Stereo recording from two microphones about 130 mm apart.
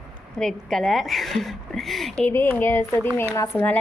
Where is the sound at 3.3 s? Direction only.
25° left (ahead or behind).